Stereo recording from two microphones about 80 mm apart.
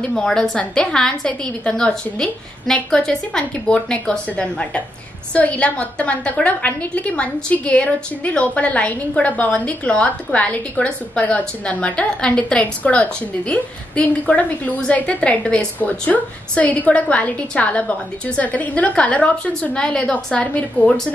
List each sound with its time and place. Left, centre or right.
0.1 s a woman's voice: centre